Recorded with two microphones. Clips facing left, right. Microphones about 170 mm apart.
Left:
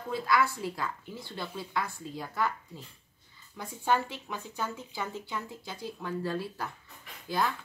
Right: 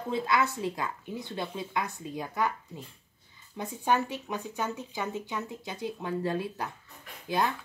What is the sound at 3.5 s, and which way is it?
Speech, 20° right (ahead or behind).